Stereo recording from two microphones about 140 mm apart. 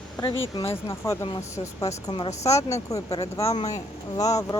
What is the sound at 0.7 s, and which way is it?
Speech, 20° left (ahead or behind).